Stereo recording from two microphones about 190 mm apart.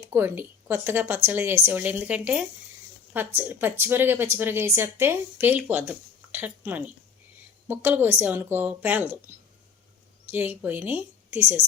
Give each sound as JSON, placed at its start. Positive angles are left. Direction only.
{"t": 0.0, "sound": "speech", "side_deg": -15}
{"t": 10.3, "sound": "speech", "side_deg": -10}